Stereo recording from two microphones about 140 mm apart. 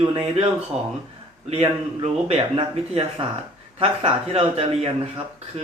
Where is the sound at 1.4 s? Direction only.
45° right (ahead or behind).